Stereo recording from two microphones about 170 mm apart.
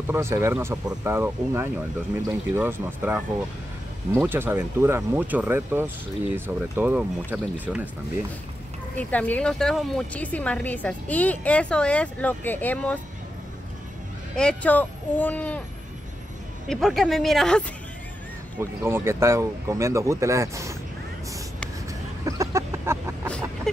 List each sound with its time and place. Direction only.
0.1 s speech: 15° right (ahead or behind)
8.9 s speech: 10° left (ahead or behind)
14.3 s speech: 5° left (ahead or behind)
16.6 s a woman's voice: centre (ahead or behind)
18.6 s speech: 15° right (ahead or behind)
22.2 s chicken: 15° right (ahead or behind)
23.2 s a sound: 5° left (ahead or behind)